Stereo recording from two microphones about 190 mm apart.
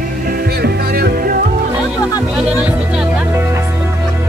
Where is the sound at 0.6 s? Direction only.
55° right (ahead or behind).